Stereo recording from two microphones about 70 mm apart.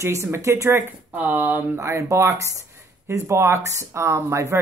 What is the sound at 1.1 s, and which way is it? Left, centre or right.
Speech, right.